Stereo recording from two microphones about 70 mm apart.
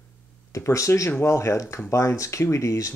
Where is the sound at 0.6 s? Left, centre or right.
Left.